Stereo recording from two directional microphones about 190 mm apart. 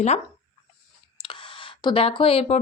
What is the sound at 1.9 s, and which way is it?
Speech, 25° left (ahead or behind).